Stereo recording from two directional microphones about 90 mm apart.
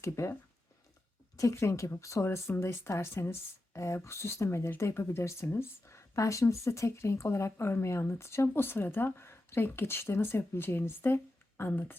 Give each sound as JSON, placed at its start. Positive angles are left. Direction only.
{"t": 0.0, "sound": "speech", "side_deg": 30}
{"t": 1.4, "sound": "speech", "side_deg": 35}